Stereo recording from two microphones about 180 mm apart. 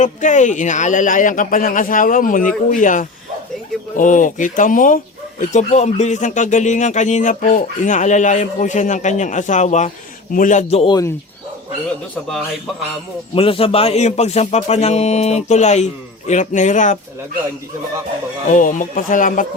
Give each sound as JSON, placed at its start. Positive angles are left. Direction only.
{"t": 0.0, "sound": "speech", "side_deg": 45}
{"t": 10.8, "sound": "speech", "side_deg": 20}
{"t": 13.3, "sound": "speech", "side_deg": 30}
{"t": 18.5, "sound": "speech", "side_deg": 45}